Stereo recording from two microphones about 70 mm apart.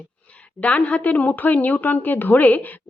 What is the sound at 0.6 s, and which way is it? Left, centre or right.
A woman's voice, centre.